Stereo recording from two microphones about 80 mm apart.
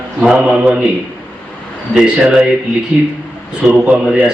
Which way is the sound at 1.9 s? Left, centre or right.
Centre.